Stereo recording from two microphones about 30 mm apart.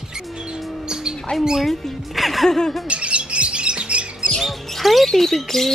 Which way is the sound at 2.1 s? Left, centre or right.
Centre.